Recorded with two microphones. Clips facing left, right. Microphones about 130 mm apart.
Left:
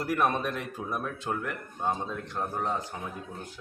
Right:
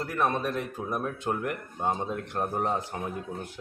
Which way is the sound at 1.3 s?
10° right (ahead or behind).